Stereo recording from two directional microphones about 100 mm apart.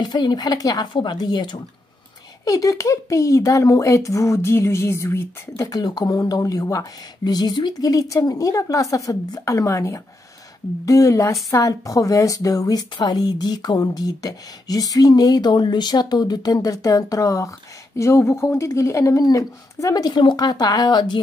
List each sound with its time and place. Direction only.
0.0 s speech: 50° left (ahead or behind)
2.4 s a woman's voice: 35° left (ahead or behind)
5.7 s a woman's voice: 40° left (ahead or behind)